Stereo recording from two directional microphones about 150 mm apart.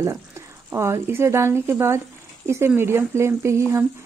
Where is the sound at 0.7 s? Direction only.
15° right (ahead or behind).